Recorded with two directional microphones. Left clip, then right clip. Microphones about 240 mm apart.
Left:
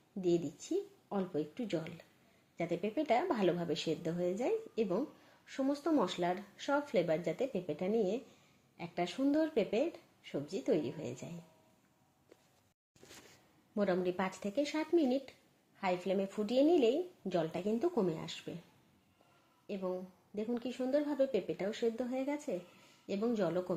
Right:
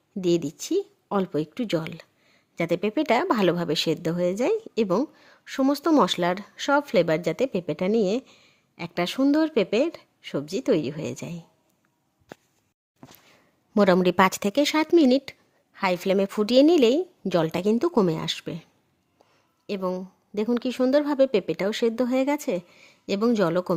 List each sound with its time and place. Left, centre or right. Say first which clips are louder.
0.2 s speech: right 10 dB; right
13.7 s speech: right 15 dB; right
19.6 s speech: right 11 dB; right